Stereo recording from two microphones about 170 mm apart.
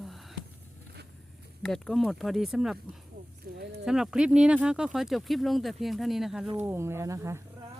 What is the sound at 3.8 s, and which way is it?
Speech, 5° right (ahead or behind).